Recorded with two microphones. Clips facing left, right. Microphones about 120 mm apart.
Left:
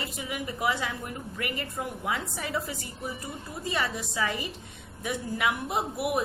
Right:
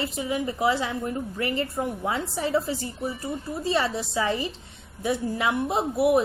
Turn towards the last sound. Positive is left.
turn(degrees=-25)  # may be behind; listen again after turning